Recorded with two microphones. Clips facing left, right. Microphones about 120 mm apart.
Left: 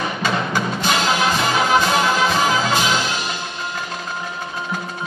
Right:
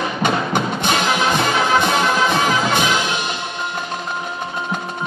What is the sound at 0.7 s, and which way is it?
Music, 20° right (ahead or behind).